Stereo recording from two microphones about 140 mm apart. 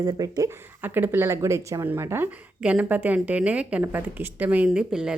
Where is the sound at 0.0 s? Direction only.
25° right (ahead or behind).